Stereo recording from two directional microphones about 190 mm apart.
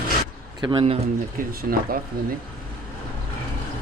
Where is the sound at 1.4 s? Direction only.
50° right (ahead or behind).